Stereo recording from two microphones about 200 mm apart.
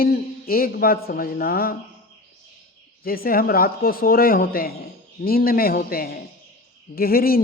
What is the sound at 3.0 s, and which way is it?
A man's voice, 50° left (ahead or behind).